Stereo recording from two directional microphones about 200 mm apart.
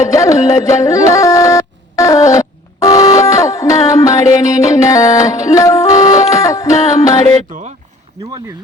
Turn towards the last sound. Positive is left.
turn(degrees=-40)  # may be behind; listen again after turning